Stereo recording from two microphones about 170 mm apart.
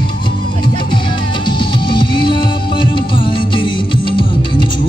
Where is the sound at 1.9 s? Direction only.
30° left (ahead or behind).